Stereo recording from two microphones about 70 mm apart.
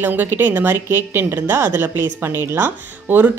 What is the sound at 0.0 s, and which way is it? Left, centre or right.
Speech, right.